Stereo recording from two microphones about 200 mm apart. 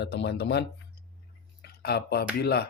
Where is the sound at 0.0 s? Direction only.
60° left (ahead or behind).